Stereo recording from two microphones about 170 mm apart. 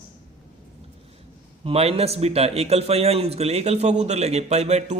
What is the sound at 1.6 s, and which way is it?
A man's voice, 35° right (ahead or behind).